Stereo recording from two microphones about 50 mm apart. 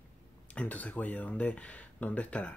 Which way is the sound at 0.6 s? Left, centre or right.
Left.